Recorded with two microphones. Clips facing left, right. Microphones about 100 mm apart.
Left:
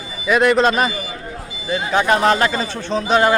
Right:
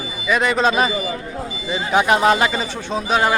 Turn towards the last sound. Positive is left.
turn(degrees=-5)  # may be behind; listen again after turning